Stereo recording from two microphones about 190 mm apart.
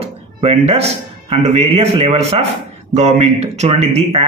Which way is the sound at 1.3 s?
35° right (ahead or behind).